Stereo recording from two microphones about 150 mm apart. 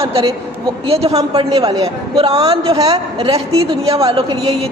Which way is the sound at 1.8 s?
40° right (ahead or behind).